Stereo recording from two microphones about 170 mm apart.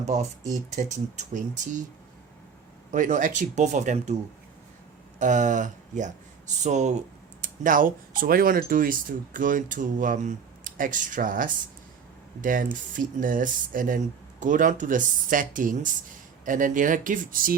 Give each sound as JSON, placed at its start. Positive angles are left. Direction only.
{"t": 0.0, "sound": "speech", "side_deg": -45}
{"t": 2.9, "sound": "speech", "side_deg": -50}
{"t": 5.2, "sound": "speech", "side_deg": -45}